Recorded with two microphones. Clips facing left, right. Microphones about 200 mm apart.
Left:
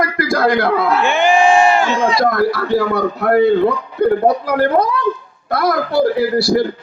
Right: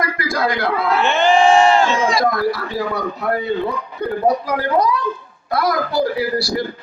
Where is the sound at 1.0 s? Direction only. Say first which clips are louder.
Right 1 dB; 10° left (ahead or behind).